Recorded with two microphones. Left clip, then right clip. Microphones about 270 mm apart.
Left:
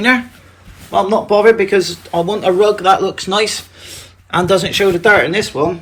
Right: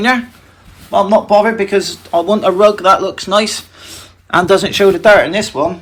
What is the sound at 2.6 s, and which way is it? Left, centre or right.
Speech, centre.